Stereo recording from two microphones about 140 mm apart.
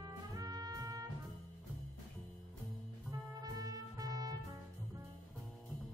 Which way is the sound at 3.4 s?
25° right (ahead or behind).